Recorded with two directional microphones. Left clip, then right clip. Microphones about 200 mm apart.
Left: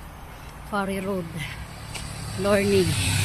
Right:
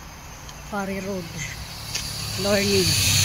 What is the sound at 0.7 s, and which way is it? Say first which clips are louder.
Speech: left 2 dB; 10° left (ahead or behind).